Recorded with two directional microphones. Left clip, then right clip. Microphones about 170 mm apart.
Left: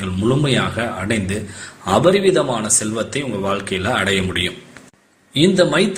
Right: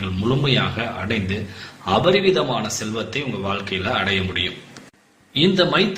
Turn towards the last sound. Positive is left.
turn(degrees=25)  # may be behind; listen again after turning